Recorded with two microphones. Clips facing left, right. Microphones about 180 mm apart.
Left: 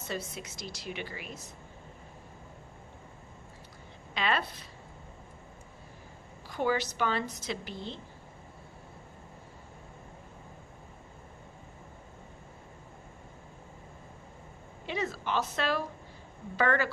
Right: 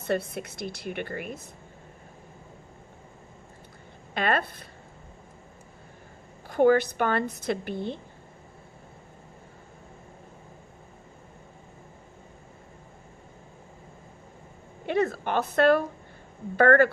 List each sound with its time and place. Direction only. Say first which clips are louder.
0.0 s a woman's voice: right 9 dB; 60° right (ahead or behind)
4.1 s speech: right 5 dB; 55° right (ahead or behind)
6.5 s a woman's voice: right 10 dB; 55° right (ahead or behind)
14.8 s a woman's voice: right 8 dB; 55° right (ahead or behind)